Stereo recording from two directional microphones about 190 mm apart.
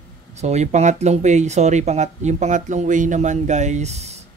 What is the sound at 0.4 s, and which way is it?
Speech, 35° right (ahead or behind).